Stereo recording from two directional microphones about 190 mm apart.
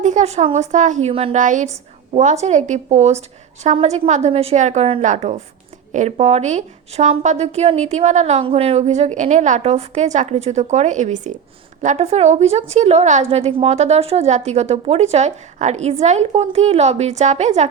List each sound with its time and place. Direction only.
0.0 s a woman's voice: 40° right (ahead or behind)